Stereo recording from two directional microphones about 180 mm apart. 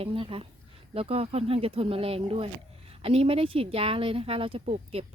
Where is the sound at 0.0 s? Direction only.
30° right (ahead or behind).